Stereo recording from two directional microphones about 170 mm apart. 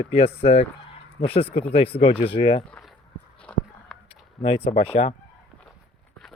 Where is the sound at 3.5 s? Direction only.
5° left (ahead or behind).